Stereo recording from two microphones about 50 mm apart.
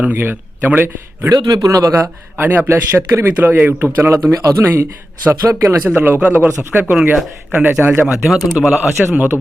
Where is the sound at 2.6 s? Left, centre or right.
Right.